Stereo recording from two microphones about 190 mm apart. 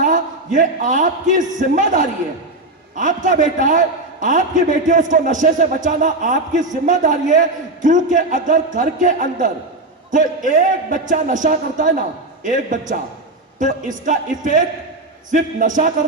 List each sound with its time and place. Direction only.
0.0 s a man's voice: 40° right (ahead or behind)
15.3 s a man's voice: 40° right (ahead or behind)